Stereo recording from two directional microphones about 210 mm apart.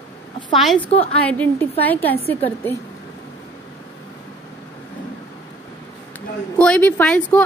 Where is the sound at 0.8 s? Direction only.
25° left (ahead or behind).